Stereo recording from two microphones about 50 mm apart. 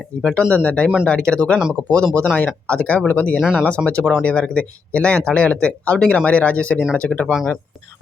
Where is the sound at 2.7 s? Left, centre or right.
Left.